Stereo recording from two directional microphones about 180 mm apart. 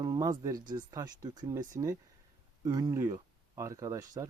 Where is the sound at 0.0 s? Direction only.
20° right (ahead or behind).